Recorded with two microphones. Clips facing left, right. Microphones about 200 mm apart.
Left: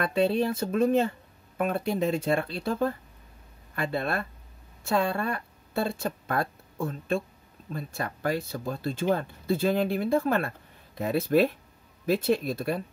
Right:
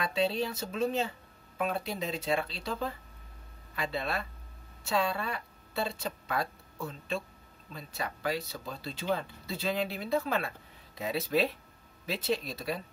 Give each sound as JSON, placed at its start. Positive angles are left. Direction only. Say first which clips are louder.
{"t": 0.0, "sound": "speech", "louder": "left 6 dB", "side_deg": 55}